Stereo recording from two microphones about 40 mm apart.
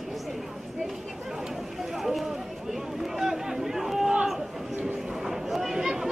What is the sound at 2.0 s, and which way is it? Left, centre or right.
Run, centre.